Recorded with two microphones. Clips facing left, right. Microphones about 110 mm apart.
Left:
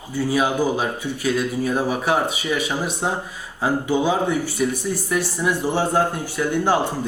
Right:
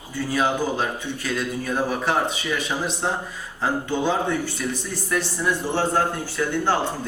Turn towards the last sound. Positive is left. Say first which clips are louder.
# left 3 dB
turn(degrees=15)  # may be behind; listen again after turning